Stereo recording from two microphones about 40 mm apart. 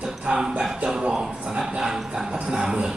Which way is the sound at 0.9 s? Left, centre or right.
Centre.